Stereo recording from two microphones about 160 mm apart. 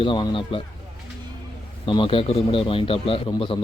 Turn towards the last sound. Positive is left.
turn(degrees=30)  # may be behind; listen again after turning